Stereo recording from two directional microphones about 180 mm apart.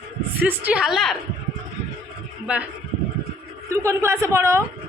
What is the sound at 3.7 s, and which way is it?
Speech, 15° right (ahead or behind).